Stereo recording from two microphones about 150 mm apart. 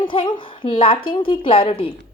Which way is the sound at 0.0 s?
35° left (ahead or behind).